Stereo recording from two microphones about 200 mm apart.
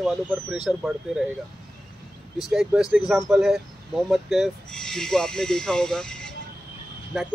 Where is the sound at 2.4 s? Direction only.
Centre (ahead or behind).